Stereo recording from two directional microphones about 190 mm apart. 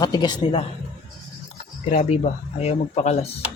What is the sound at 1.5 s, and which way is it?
Speech, 40° left (ahead or behind).